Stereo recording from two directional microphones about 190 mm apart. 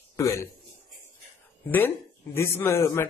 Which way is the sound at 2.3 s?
15° left (ahead or behind).